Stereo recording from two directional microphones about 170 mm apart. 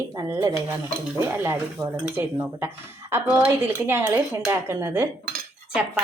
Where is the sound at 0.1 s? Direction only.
20° right (ahead or behind).